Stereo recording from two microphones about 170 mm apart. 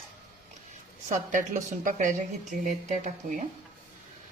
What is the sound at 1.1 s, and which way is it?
Speech, 50° right (ahead or behind).